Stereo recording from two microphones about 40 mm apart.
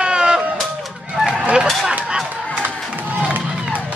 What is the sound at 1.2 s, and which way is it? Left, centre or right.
Fowl, centre.